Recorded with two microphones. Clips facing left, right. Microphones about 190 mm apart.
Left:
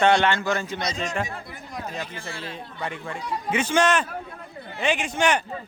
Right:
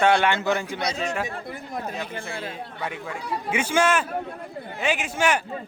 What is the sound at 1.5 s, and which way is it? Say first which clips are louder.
Speech: right 3 dB; 55° right (ahead or behind).